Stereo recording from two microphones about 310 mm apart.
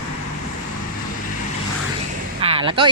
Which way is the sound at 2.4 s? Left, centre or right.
Centre.